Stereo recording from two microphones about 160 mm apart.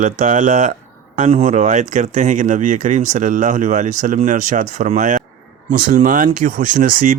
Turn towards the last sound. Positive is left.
turn(degrees=-55)  # may be behind; listen again after turning